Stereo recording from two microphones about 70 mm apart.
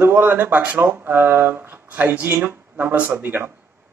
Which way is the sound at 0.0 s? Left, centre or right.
Right.